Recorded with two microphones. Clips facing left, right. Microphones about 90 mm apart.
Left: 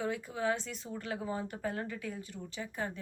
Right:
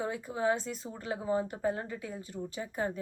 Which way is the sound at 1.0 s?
25° right (ahead or behind).